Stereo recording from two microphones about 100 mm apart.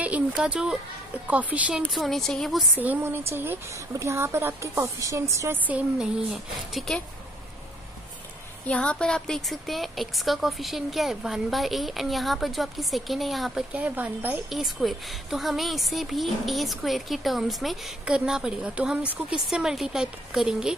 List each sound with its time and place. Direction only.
0.0 s a sound: 10° right (ahead or behind)
1.2 s speech: 15° right (ahead or behind)
2.0 s a woman's voice: 5° left (ahead or behind)
2.8 s a woman's voice: 20° right (ahead or behind)
5.7 s speech: 15° right (ahead or behind)
6.3 s a woman's voice: centre (ahead or behind)
8.6 s a woman's voice: 10° left (ahead or behind)
13.7 s speech: 15° right (ahead or behind)
14.5 s a woman's voice: centre (ahead or behind)